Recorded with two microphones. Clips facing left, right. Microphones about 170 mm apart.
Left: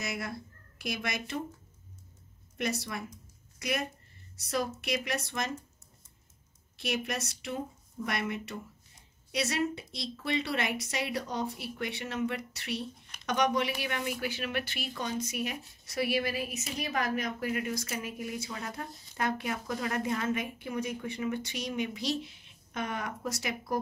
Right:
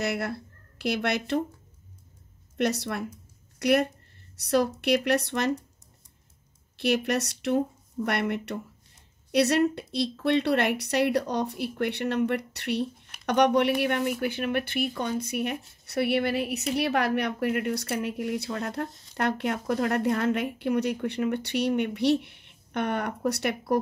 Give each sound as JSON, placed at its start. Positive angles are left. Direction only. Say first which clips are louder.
{"t": 0.0, "sound": "speech", "louder": "right 8 dB", "side_deg": -65}
{"t": 2.5, "sound": "speech", "louder": "right 7 dB", "side_deg": -70}
{"t": 6.8, "sound": "speech", "louder": "right 9 dB", "side_deg": -65}